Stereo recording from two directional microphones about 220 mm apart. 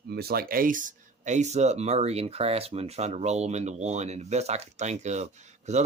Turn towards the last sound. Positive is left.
turn(degrees=-30)  # may be behind; listen again after turning